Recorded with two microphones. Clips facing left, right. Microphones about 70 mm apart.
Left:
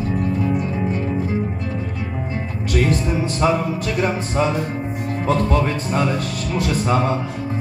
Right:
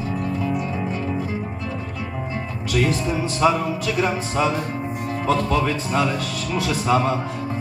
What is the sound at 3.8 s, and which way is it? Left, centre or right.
Speech, left.